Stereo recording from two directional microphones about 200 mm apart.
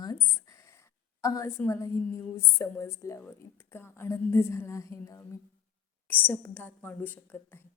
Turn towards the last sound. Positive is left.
turn(degrees=10)  # may be behind; listen again after turning